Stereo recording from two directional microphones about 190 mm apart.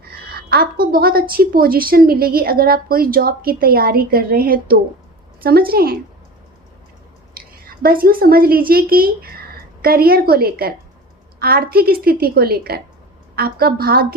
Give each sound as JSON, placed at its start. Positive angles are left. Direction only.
{"t": 0.0, "sound": "a woman's voice", "side_deg": -55}
{"t": 7.3, "sound": "a woman's voice", "side_deg": -50}